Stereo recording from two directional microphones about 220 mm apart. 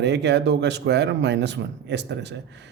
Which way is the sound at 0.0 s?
50° right (ahead or behind).